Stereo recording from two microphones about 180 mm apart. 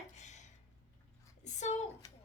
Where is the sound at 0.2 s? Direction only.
40° left (ahead or behind).